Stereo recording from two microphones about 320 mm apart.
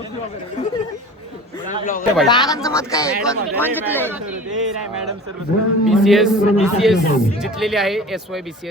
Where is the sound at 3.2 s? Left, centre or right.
Centre.